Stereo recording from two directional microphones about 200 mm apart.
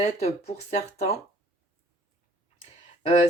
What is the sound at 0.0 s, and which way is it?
Speech, 30° left (ahead or behind).